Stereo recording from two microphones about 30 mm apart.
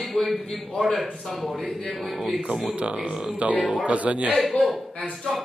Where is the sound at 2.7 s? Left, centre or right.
Right.